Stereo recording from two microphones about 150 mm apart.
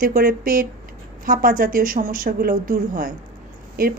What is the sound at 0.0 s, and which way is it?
A woman's voice, 70° right (ahead or behind).